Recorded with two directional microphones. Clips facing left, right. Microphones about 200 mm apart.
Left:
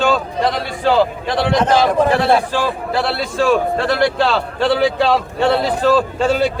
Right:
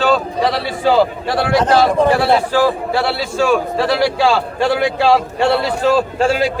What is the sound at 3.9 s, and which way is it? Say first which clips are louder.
A man's voice: right 3 dB; 10° right (ahead or behind).